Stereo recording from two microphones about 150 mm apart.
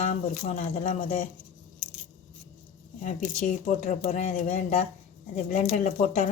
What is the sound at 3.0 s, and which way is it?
Speech, 55° left (ahead or behind).